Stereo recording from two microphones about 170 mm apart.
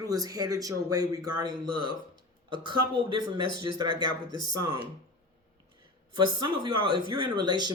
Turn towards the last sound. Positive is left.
turn(degrees=-25)  # may be behind; listen again after turning